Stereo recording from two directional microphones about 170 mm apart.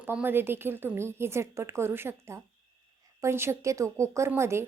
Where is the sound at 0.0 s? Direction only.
10° right (ahead or behind).